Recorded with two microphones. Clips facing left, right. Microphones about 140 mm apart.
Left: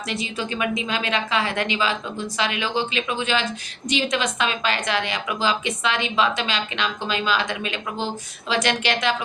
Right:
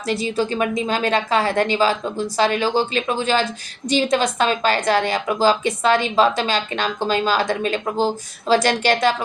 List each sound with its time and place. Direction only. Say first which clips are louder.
0.1 s a woman's voice: right 8 dB; 35° right (ahead or behind)